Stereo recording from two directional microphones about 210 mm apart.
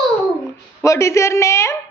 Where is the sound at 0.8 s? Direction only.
15° left (ahead or behind).